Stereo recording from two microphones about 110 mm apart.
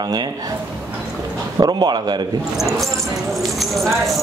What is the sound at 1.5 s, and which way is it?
Speech, 35° right (ahead or behind).